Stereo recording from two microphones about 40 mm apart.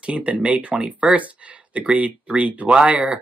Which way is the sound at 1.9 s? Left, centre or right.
Right.